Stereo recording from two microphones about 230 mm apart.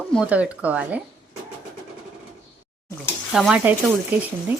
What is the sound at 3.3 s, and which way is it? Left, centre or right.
Speech, centre.